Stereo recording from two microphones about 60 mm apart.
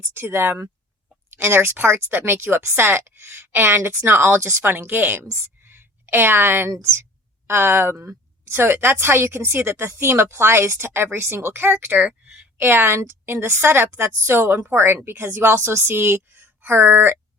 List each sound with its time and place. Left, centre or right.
0.0 s a woman's voice: right
5.3 s a sound: right
7.4 s a woman's voice: right
12.5 s a woman's voice: right